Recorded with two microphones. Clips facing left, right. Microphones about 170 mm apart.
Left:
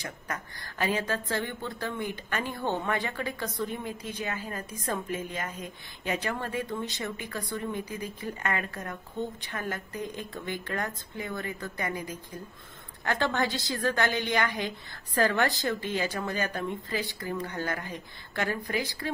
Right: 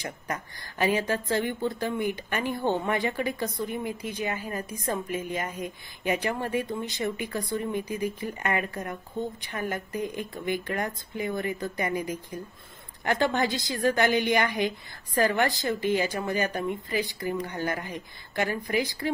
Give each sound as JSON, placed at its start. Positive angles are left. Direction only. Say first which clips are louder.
{"t": 0.3, "sound": "speech", "louder": "right 3 dB", "side_deg": -15}